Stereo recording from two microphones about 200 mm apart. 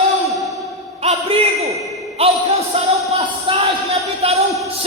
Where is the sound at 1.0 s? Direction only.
30° right (ahead or behind).